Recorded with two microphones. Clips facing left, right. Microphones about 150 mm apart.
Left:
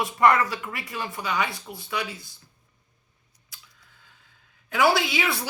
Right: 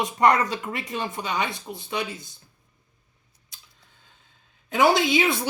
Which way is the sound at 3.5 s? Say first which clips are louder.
Left 1 dB; 20° right (ahead or behind).